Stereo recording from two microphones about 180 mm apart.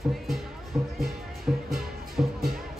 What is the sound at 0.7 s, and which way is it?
Music, 5° right (ahead or behind).